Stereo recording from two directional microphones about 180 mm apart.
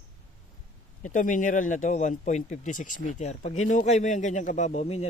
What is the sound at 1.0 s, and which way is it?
Speech, 45° left (ahead or behind).